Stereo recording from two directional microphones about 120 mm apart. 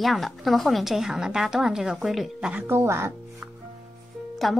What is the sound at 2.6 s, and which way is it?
Speech, 20° right (ahead or behind).